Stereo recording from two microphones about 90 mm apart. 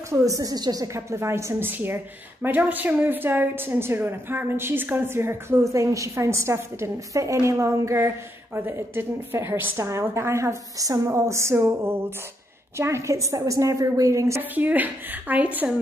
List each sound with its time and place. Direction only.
0.1 s a woman's voice: 40° right (ahead or behind)
0.9 s a woman's voice: 30° right (ahead or behind)
14.5 s a woman's voice: 20° right (ahead or behind)